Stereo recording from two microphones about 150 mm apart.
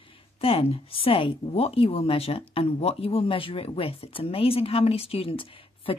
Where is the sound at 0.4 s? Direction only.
40° left (ahead or behind).